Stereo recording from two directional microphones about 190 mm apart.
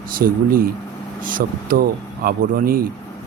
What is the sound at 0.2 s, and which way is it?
Speech, 50° right (ahead or behind).